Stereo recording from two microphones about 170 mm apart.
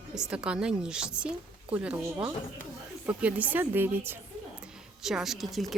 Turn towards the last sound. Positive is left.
turn(degrees=0)  # may be behind; listen again after turning